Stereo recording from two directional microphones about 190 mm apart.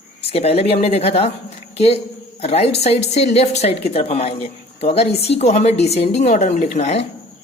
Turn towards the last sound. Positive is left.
turn(degrees=35)  # may be behind; listen again after turning